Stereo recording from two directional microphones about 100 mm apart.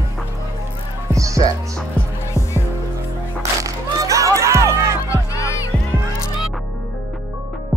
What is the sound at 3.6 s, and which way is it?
Music, 35° right (ahead or behind).